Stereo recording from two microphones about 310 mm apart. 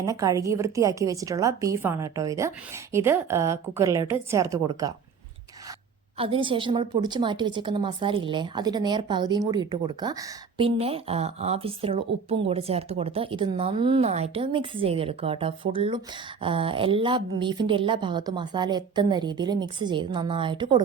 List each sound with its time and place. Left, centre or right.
0.0 s a woman's voice: centre
6.1 s a woman's voice: centre